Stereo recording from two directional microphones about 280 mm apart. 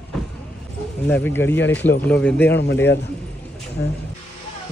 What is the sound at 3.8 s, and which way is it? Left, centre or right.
Speech, left.